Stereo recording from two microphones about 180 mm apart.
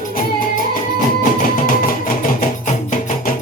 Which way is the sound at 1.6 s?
50° left (ahead or behind).